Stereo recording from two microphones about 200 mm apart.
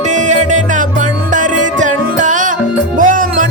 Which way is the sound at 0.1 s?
40° right (ahead or behind).